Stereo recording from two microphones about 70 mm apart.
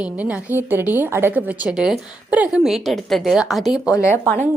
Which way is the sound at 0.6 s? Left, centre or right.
Right.